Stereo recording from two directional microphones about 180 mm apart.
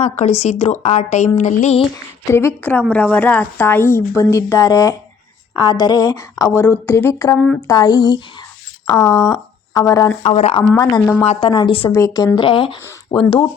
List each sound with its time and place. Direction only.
0.0 s speech: 40° left (ahead or behind)
2.2 s speech: 15° left (ahead or behind)
7.3 s speech: 5° left (ahead or behind)
7.7 s speech: 20° left (ahead or behind)
9.0 s speech: 5° left (ahead or behind)
9.3 s speech: 20° left (ahead or behind)
10.2 s speech: 35° left (ahead or behind)
10.8 s speech: 20° left (ahead or behind)
11.9 s speech: 15° left (ahead or behind)